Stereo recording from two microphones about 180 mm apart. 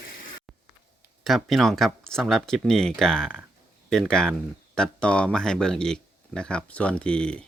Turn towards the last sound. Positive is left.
turn(degrees=5)  # may be behind; listen again after turning